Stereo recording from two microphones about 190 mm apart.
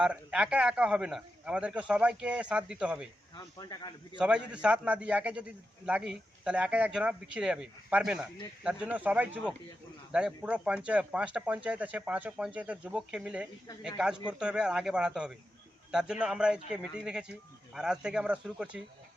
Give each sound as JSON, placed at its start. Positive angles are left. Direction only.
{"t": 0.0, "sound": "a man's voice", "side_deg": -5}
{"t": 3.3, "sound": "speech", "side_deg": 20}
{"t": 4.2, "sound": "a man's voice", "side_deg": -5}